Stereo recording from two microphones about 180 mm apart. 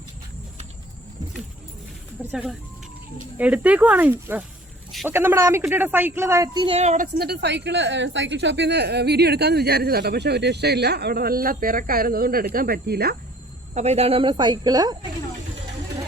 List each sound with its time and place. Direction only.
2.3 s speech: 5° right (ahead or behind); by 6.7 s 25° right (ahead or behind)
6.7 s a woman's voice: 45° right (ahead or behind); by 13.1 s 60° right (ahead or behind)
13.7 s speech: 35° right (ahead or behind); by 14.9 s 20° right (ahead or behind)